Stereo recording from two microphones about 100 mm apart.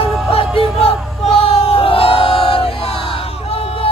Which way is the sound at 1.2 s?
70° left (ahead or behind).